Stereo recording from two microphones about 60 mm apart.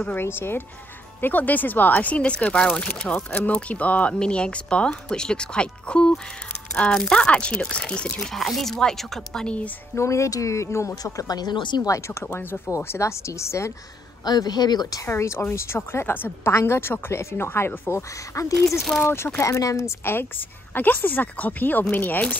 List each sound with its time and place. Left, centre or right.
0.1 s a woman's voice: left; by 8.3 s centre
8.3 s speech: centre
9.9 s speech: left
11.0 s speech: left
12.1 s a woman's voice: left
12.7 s speech: left
14.3 s speech: left
15.0 s a woman's voice: left
18.3 s speech: left
19.0 s a woman's voice: left
19.4 s speech: left
20.1 s a woman's voice: left